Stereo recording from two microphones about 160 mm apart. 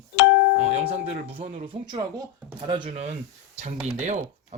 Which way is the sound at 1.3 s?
35° right (ahead or behind).